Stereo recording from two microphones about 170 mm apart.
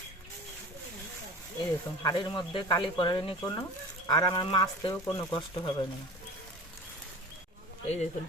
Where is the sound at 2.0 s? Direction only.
25° left (ahead or behind).